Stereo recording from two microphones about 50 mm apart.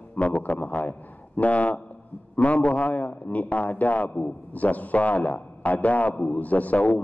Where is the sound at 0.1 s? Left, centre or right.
Left.